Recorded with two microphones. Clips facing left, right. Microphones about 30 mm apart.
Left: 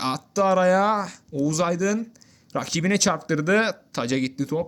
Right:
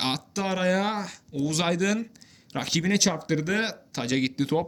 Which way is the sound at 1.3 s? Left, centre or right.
Right.